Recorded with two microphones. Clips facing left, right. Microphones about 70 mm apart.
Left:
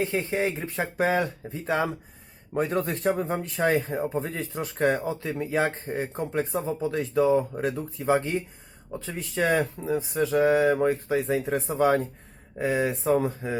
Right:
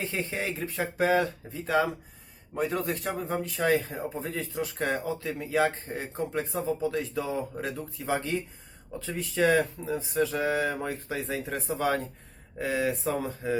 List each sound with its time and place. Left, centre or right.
0.3 s speech: left